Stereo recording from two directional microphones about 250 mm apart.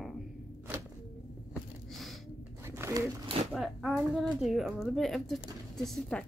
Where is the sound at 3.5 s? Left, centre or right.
Centre.